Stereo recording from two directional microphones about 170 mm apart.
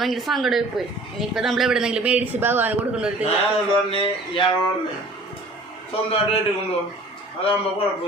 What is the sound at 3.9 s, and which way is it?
Speech, 30° left (ahead or behind).